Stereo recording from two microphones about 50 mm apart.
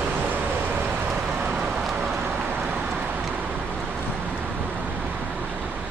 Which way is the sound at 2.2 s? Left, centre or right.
Right.